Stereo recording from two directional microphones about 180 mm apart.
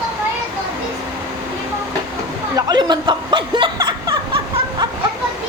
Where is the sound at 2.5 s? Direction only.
25° right (ahead or behind).